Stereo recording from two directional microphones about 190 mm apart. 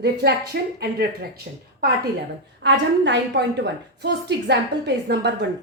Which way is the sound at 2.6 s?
70° right (ahead or behind).